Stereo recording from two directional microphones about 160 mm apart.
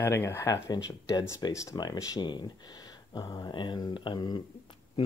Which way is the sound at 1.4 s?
20° left (ahead or behind).